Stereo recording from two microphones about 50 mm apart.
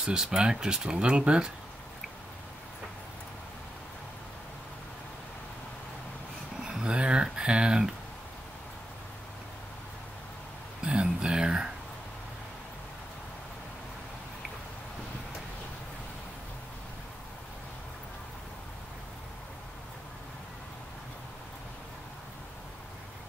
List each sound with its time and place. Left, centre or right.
0.0 s speech: centre
6.6 s speech: centre
10.8 s a sound: right